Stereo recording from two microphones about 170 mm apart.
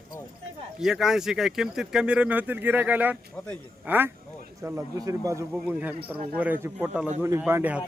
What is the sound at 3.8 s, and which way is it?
Speech, 10° right (ahead or behind).